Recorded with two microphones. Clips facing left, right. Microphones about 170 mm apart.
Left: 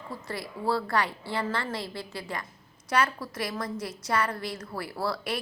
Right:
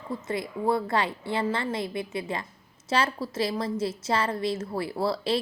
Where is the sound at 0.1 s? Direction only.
20° right (ahead or behind).